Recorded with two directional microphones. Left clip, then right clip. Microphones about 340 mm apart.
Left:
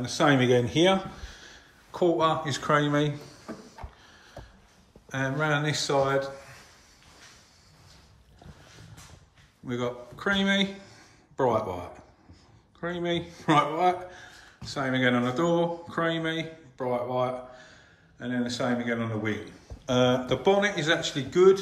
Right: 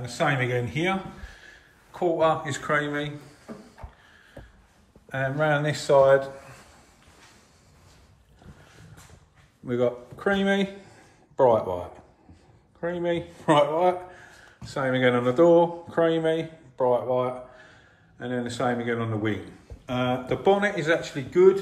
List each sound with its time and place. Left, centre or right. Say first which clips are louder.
0.0 s speech: left 2 dB; centre
5.1 s speech: right 3 dB; centre
9.7 s speech: right 7 dB; centre